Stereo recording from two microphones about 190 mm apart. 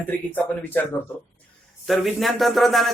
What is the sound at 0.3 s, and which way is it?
Speech, 10° left (ahead or behind).